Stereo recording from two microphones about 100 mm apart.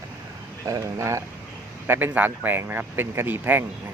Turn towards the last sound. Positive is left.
turn(degrees=-20)  # may be behind; listen again after turning